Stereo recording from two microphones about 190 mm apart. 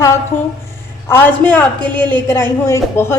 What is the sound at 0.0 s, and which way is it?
A woman's voice, 15° left (ahead or behind).